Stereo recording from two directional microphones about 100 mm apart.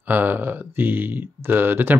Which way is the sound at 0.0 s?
20° right (ahead or behind).